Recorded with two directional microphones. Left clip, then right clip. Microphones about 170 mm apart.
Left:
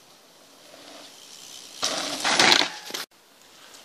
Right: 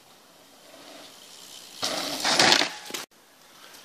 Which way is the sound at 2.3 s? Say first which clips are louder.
Left 1 dB; 20° right (ahead or behind).